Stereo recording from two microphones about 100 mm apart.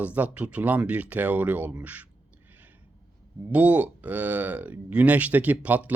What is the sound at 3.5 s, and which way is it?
Speech, 15° right (ahead or behind).